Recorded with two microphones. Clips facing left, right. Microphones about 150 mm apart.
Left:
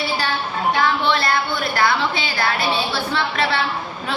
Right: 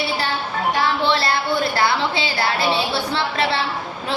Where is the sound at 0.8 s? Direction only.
30° right (ahead or behind).